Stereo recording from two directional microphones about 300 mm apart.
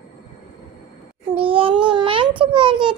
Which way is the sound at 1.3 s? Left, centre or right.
Centre.